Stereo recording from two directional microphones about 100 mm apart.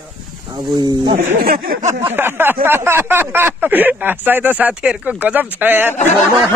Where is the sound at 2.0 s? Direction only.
20° right (ahead or behind).